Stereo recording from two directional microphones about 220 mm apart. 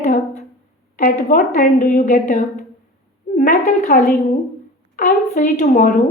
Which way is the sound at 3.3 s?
40° left (ahead or behind).